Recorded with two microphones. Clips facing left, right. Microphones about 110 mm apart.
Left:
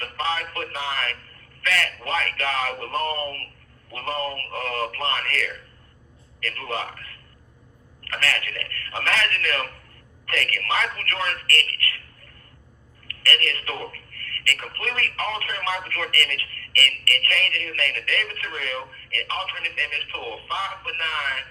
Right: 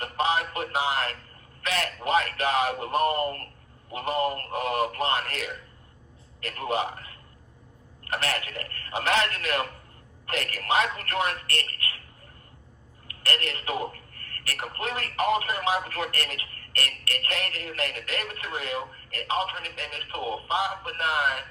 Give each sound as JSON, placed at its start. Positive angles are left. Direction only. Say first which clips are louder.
{"t": 0.0, "sound": "a sound", "louder": "right 2 dB", "side_deg": -20}
{"t": 0.5, "sound": "a man's voice", "louder": "right 3 dB", "side_deg": -20}
{"t": 13.1, "sound": "a man's voice", "louder": "left 3 dB", "side_deg": -20}